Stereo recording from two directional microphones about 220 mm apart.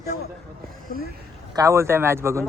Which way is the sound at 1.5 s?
15° right (ahead or behind).